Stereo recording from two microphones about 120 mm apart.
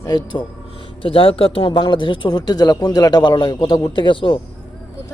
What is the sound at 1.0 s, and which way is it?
Speech, 50° left (ahead or behind).